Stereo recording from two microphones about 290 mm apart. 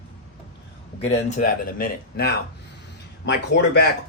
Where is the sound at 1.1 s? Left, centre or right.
Left.